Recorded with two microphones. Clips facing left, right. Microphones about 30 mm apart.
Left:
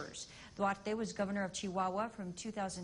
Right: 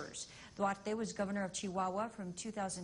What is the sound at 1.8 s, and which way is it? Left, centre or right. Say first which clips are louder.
Speech: left 1 dB; left.